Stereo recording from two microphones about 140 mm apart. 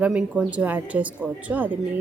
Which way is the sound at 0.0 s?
10° right (ahead or behind).